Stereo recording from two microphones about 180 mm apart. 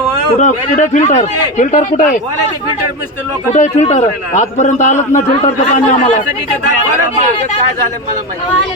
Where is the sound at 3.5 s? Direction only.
40° left (ahead or behind).